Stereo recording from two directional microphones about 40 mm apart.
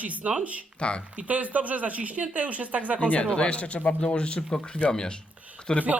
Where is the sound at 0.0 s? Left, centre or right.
Right.